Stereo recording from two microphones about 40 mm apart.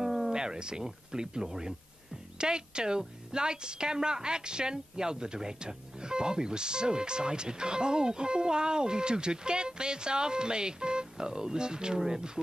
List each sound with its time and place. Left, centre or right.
0.0 s a woman's voice: centre